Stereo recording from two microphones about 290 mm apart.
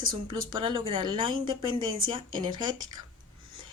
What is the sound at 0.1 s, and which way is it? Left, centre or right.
Speech, centre.